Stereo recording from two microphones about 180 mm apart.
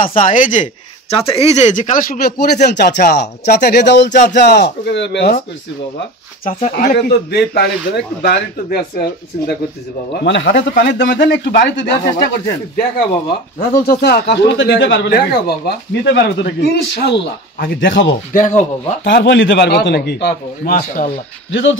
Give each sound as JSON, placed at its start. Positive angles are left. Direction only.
{"t": 0.0, "sound": "speech", "side_deg": 50}
{"t": 1.1, "sound": "speech", "side_deg": 30}
{"t": 6.7, "sound": "speech", "side_deg": 60}
{"t": 10.1, "sound": "speech", "side_deg": 80}
{"t": 19.0, "sound": "speech", "side_deg": 75}
{"t": 20.7, "sound": "speech", "side_deg": 50}
{"t": 21.5, "sound": "speech", "side_deg": 90}